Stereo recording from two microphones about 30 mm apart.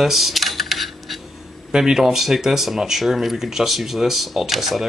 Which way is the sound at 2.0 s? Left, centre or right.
Centre.